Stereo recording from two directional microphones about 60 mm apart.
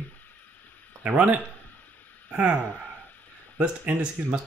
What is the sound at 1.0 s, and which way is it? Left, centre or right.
Speech, right.